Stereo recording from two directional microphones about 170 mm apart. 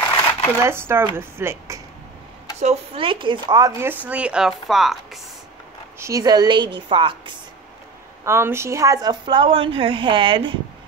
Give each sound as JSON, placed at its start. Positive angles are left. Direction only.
{"t": 0.6, "sound": "speech", "side_deg": -15}
{"t": 2.6, "sound": "speech", "side_deg": -40}
{"t": 5.9, "sound": "a woman's voice", "side_deg": -20}
{"t": 8.3, "sound": "a woman's voice", "side_deg": -15}